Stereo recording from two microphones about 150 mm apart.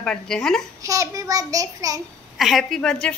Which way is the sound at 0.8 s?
20° right (ahead or behind).